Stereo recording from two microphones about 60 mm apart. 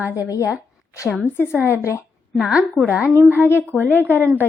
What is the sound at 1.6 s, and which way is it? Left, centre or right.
Speech, right.